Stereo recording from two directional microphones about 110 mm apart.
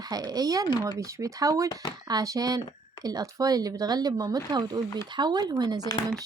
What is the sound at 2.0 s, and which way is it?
Speech, 35° right (ahead or behind).